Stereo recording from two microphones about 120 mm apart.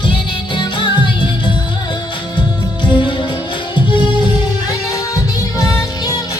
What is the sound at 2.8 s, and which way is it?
Music, 40° left (ahead or behind).